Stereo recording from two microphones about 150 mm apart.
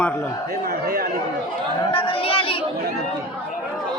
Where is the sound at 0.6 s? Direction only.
90° right.